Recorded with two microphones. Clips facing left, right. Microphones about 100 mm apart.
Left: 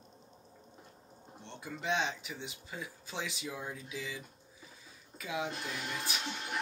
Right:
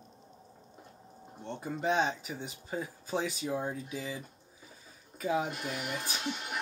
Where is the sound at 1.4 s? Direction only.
40° right (ahead or behind).